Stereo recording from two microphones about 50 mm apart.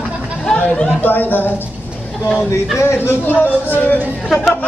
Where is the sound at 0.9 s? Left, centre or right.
Left.